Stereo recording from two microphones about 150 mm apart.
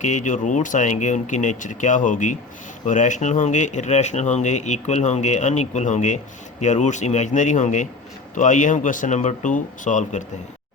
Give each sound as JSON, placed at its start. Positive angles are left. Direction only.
{"t": 0.0, "sound": "speech", "side_deg": 55}